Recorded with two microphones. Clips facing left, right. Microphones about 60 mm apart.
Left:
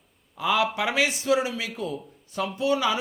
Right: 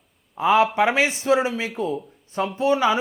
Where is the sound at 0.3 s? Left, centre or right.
Right.